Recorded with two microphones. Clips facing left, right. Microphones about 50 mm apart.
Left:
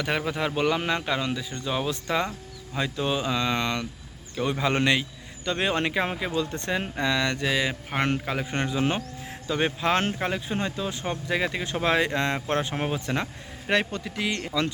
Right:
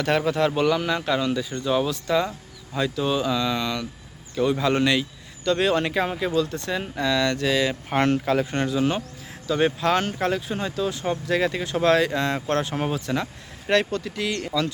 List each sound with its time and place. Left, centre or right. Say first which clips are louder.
0.0 s speech: right 5 dB; centre
3.5 s speech: right 1 dB; left
4.4 s speech: right 4 dB; centre